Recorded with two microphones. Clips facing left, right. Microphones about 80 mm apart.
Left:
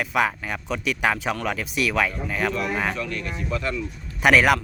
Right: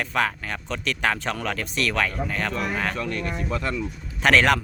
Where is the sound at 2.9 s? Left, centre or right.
Right.